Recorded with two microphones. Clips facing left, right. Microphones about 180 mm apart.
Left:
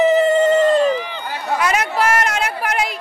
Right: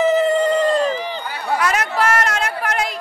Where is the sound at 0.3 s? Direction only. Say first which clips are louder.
Left 3 dB; 5° left (ahead or behind).